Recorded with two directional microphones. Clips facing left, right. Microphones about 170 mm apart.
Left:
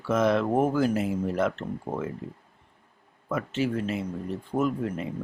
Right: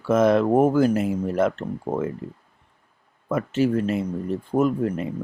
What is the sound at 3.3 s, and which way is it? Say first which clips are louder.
Speech: right 6 dB; 45° right (ahead or behind).